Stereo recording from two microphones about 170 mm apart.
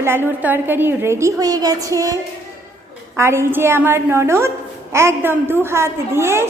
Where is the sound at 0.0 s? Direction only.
15° right (ahead or behind).